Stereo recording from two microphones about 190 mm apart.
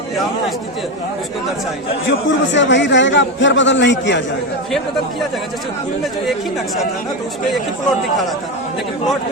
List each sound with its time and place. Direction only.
2.0 s a man's voice: 70° left (ahead or behind)